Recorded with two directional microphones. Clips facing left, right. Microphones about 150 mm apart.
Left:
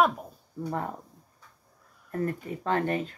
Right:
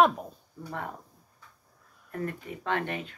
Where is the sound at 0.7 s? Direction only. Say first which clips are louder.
Left 4 dB; 35° left (ahead or behind).